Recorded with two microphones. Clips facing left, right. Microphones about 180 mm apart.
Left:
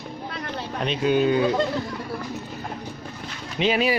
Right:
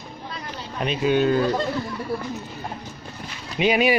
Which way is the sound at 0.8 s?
5° right (ahead or behind).